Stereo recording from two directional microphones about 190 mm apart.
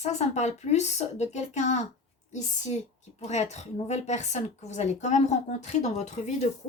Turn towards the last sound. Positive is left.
turn(degrees=35)  # may be behind; listen again after turning